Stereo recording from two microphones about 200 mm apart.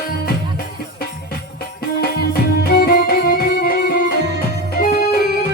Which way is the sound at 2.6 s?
50° left (ahead or behind).